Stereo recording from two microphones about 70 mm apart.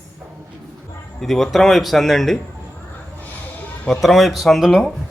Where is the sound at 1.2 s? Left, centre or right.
Centre.